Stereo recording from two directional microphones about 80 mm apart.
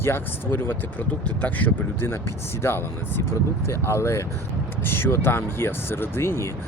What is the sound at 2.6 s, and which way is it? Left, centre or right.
Speech, left.